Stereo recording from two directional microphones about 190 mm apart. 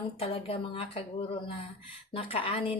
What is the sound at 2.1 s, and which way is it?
Speech, 30° left (ahead or behind).